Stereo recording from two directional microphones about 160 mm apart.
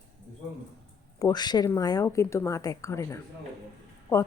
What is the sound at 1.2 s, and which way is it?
Speech, 25° left (ahead or behind).